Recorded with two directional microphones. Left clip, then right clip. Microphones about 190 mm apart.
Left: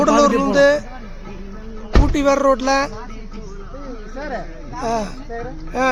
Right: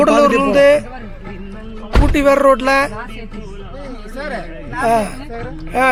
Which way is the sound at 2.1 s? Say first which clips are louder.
Right 5 dB; 10° right (ahead or behind).